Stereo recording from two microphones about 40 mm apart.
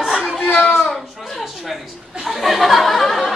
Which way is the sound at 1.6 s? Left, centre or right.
Centre.